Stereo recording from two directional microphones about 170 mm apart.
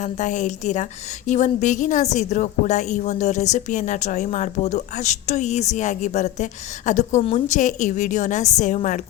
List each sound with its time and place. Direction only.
0.0 s a woman's voice: 45° left (ahead or behind)